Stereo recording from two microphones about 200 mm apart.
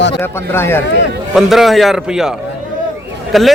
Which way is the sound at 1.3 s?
Centre (ahead or behind).